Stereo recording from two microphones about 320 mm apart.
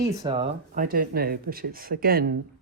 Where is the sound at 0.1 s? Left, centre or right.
Centre.